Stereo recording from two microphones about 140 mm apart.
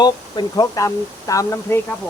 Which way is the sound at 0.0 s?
30° left (ahead or behind).